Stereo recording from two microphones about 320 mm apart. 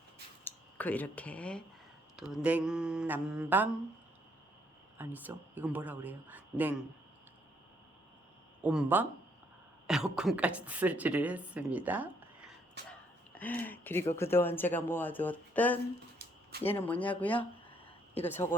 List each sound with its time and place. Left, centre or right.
0.4 s a woman's voice: centre
4.9 s a woman's voice: centre
8.6 s a woman's voice: centre
12.9 s a sound: centre
14.2 s a woman's voice: centre
17.3 s a sound: centre
18.3 s speech: centre